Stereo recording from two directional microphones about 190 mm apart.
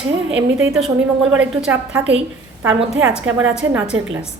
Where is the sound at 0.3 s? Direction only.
85° right.